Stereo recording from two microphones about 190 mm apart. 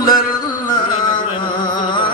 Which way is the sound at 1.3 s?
25° left (ahead or behind).